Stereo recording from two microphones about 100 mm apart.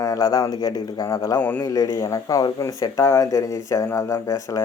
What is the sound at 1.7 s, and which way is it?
Speech, 35° left (ahead or behind).